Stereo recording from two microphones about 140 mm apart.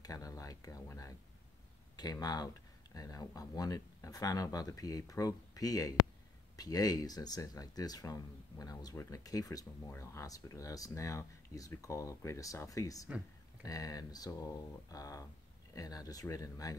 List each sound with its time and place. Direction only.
0.0 s speech: 25° left (ahead or behind)